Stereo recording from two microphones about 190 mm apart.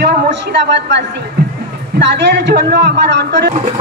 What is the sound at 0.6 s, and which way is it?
A man's voice, 65° right (ahead or behind).